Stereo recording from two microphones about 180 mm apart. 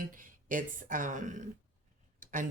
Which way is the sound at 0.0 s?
50° right (ahead or behind).